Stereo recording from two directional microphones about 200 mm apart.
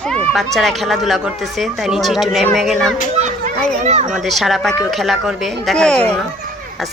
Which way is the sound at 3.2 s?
35° right (ahead or behind).